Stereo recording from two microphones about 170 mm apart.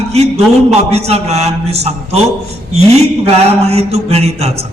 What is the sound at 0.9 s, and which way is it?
A man's voice, 40° right (ahead or behind).